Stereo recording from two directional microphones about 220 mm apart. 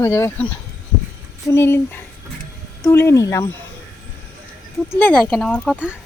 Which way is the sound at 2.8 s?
15° left (ahead or behind).